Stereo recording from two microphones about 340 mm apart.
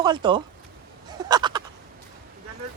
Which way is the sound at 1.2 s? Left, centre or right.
Centre.